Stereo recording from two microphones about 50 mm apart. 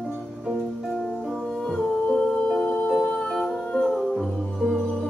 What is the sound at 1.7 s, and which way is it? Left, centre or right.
Music, centre.